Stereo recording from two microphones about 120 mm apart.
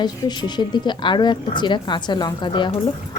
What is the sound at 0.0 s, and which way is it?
Speech, 35° left (ahead or behind).